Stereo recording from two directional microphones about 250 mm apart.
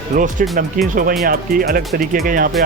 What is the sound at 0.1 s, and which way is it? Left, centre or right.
Speech, right.